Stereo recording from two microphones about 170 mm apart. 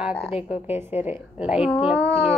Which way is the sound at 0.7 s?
10° right (ahead or behind).